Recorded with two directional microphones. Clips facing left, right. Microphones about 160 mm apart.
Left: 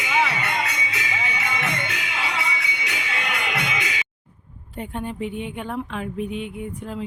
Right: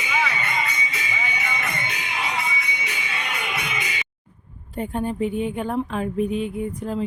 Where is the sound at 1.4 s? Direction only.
90° left.